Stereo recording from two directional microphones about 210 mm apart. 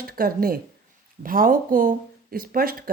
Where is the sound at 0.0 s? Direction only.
45° right (ahead or behind).